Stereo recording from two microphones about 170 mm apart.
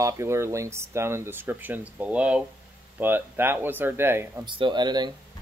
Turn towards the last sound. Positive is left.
turn(degrees=-25)  # may be behind; listen again after turning